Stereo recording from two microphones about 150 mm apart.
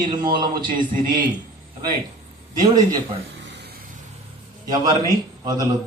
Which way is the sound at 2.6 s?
25° right (ahead or behind).